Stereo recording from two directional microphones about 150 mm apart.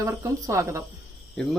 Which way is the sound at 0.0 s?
20° right (ahead or behind).